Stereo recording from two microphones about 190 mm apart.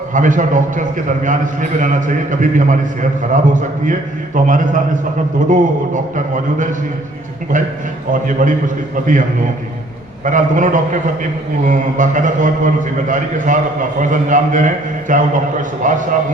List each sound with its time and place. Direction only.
0.1 s a man's voice: 45° right (ahead or behind)
8.1 s a man's voice: 45° right (ahead or behind)
10.2 s a man's voice: 40° right (ahead or behind)